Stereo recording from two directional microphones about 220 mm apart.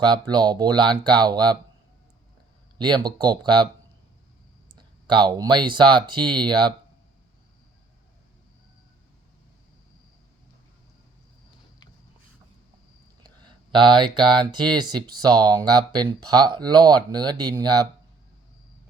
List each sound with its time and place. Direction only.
0.0 s speech: 20° right (ahead or behind)
2.7 s speech: 20° right (ahead or behind)
4.7 s speech: 20° right (ahead or behind)
13.7 s speech: 20° right (ahead or behind)